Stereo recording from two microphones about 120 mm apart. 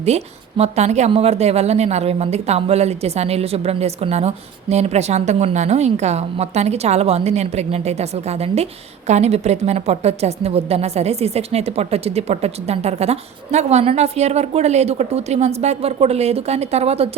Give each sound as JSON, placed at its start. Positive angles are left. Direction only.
{"t": 0.0, "sound": "a woman's voice", "side_deg": -60}